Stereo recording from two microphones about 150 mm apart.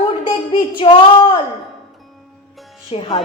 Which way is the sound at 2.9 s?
35° left (ahead or behind).